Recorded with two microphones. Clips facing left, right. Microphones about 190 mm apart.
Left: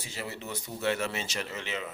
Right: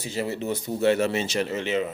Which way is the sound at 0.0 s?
30° right (ahead or behind).